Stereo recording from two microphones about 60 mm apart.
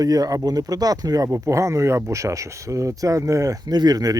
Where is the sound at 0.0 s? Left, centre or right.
Right.